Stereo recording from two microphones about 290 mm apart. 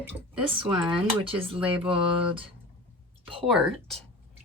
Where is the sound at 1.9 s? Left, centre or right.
Centre.